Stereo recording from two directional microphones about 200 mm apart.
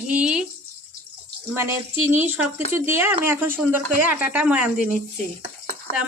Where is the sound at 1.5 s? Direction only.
15° right (ahead or behind).